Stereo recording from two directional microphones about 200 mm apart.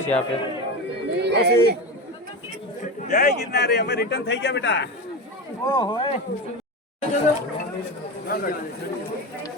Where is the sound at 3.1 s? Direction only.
45° left (ahead or behind); by 4.9 s 60° left (ahead or behind).